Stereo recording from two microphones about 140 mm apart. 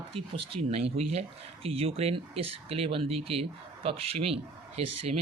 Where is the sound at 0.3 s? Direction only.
45° right (ahead or behind).